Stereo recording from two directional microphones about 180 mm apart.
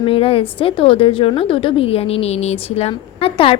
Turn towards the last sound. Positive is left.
turn(degrees=30)  # may be behind; listen again after turning